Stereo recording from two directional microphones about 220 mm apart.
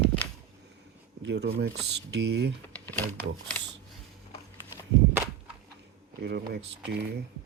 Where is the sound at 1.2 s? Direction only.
50° right (ahead or behind).